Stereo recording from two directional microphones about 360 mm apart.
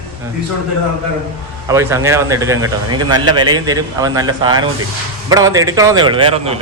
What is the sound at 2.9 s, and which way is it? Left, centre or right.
Speech, right.